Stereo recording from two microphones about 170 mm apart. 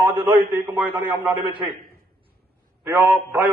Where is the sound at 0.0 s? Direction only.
10° right (ahead or behind).